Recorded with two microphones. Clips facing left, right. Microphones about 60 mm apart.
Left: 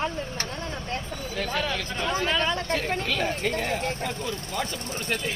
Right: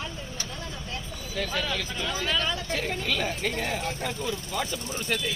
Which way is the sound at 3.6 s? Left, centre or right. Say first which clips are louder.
Left 2 dB; centre.